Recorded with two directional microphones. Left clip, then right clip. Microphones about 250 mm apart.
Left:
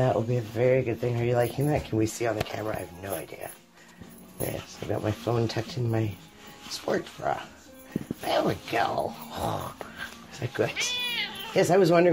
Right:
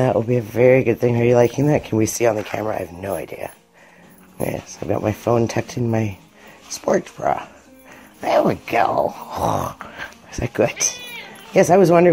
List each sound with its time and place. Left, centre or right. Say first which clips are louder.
0.0 s speech: right 8 dB; right
4.5 s speech: right 9 dB; right